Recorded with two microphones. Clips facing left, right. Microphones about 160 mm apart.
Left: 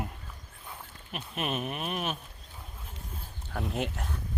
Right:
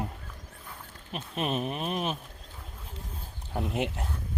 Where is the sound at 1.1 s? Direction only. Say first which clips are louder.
Right 3 dB; 35° right (ahead or behind).